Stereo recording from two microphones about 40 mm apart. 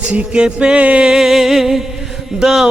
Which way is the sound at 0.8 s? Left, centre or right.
Right.